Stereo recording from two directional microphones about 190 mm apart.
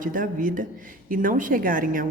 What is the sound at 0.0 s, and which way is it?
A woman's voice, 45° right (ahead or behind).